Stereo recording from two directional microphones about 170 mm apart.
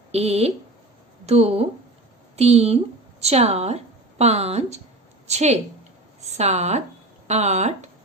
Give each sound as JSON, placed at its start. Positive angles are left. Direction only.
{"t": 0.1, "sound": "a woman's voice", "side_deg": -35}